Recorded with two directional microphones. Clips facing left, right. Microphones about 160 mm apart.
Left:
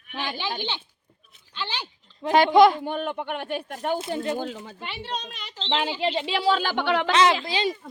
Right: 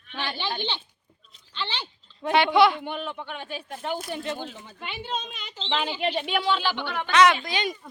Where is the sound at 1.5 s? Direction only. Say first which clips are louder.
Even; 10° left (ahead or behind).